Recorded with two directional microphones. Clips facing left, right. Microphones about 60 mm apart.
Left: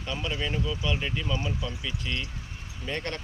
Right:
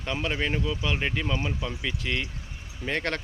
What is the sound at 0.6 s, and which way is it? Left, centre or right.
Speech, right.